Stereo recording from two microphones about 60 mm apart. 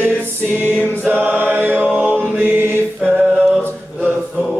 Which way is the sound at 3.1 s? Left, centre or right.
Right.